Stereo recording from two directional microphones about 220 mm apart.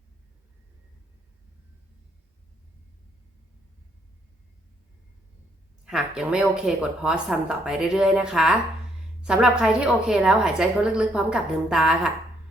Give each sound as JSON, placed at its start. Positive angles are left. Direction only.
{"t": 5.8, "sound": "a woman's voice", "side_deg": -5}